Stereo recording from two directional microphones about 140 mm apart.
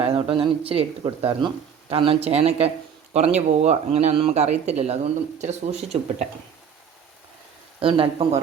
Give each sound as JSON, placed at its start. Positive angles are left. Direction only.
{"t": 0.0, "sound": "speech", "side_deg": -45}
{"t": 7.8, "sound": "speech", "side_deg": -40}